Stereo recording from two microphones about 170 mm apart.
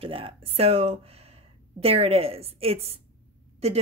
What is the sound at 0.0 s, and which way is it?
Speech, 35° right (ahead or behind).